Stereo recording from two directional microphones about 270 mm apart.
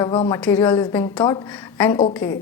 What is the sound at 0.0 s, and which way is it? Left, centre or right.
A woman's voice, centre.